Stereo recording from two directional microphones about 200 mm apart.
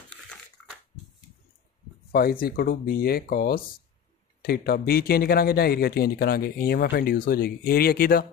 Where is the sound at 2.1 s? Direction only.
45° left (ahead or behind).